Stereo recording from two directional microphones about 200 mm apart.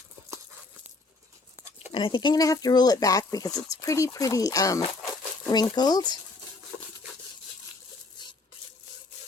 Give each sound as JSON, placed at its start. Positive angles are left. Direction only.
{"t": 1.9, "sound": "speech", "side_deg": 25}